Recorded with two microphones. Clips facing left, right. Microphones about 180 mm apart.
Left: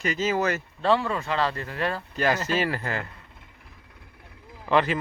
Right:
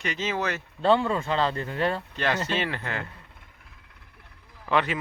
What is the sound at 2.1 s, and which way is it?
Speech, 5° left (ahead or behind).